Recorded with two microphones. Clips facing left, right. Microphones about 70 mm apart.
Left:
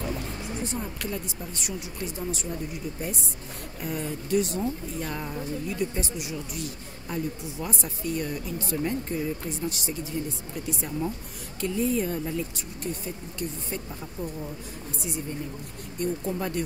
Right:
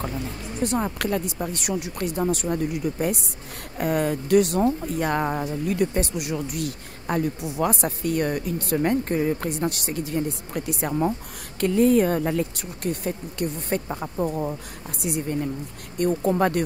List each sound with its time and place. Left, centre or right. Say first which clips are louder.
0.7 s speech: right 8 dB; right